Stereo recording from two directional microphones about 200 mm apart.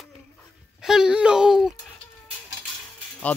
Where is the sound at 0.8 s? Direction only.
5° right (ahead or behind).